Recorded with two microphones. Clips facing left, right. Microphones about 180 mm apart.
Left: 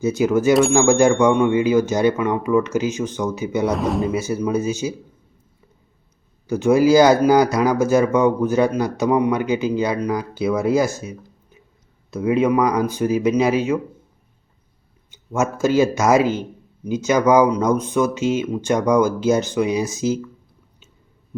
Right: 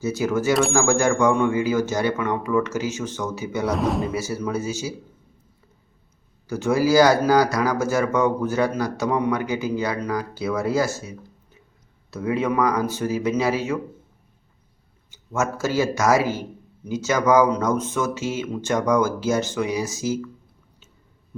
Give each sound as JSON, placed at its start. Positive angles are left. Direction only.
{"t": 0.0, "sound": "speech", "side_deg": 15}
{"t": 3.7, "sound": "speech", "side_deg": 0}
{"t": 4.1, "sound": "speech", "side_deg": 20}
{"t": 6.5, "sound": "speech", "side_deg": 20}
{"t": 12.1, "sound": "speech", "side_deg": 15}
{"t": 15.1, "sound": "speech", "side_deg": 20}